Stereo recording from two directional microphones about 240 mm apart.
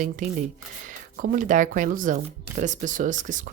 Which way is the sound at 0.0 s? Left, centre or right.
Right.